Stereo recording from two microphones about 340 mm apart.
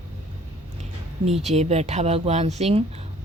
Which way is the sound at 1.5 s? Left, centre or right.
Centre.